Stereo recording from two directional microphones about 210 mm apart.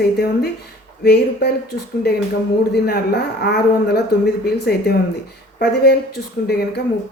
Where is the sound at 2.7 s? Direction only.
50° left (ahead or behind).